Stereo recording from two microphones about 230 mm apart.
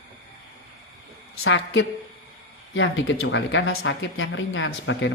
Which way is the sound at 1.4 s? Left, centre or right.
Left.